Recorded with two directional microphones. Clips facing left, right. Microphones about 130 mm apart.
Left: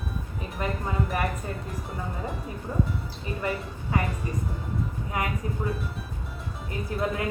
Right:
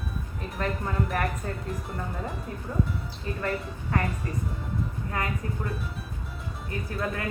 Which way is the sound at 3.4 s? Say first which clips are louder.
Even; 5° left (ahead or behind).